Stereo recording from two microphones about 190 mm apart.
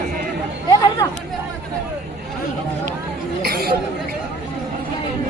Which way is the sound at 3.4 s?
55° right (ahead or behind).